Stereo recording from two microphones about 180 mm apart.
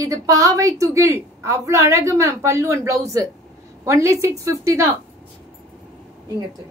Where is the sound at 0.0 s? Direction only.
20° right (ahead or behind).